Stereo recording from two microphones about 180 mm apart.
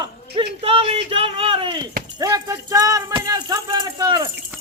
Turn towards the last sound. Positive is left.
turn(degrees=-20)  # may be behind; listen again after turning